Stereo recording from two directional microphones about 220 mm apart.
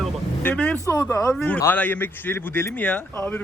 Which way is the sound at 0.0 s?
5° left (ahead or behind).